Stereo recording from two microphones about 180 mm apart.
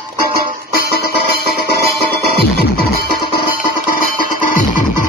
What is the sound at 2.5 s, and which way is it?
Music, 60° left (ahead or behind).